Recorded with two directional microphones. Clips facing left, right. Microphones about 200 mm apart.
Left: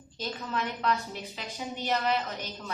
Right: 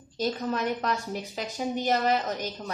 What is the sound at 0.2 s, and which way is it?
A woman's voice, 40° right (ahead or behind).